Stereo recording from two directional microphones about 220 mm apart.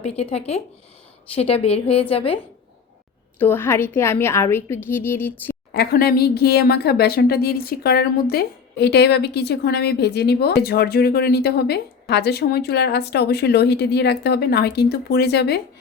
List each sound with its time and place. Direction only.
0.0 s a woman's voice: 25° left (ahead or behind)
3.3 s a woman's voice: 10° left (ahead or behind)
5.7 s speech: 45° left (ahead or behind)